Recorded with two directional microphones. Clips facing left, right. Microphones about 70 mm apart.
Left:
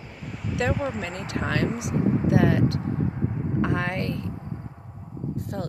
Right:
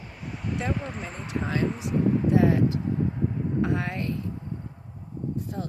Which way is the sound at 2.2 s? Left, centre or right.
Left.